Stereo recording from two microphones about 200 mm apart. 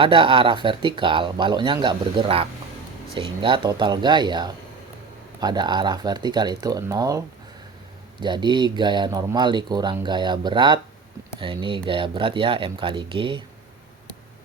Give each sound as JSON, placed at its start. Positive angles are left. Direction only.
{"t": 0.0, "sound": "speech", "side_deg": -25}
{"t": 8.2, "sound": "speech", "side_deg": -20}